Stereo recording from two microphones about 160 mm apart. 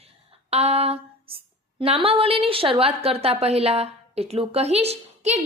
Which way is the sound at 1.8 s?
35° right (ahead or behind).